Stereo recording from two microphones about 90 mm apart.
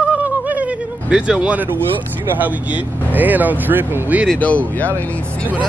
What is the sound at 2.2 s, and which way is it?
Speech, 20° right (ahead or behind).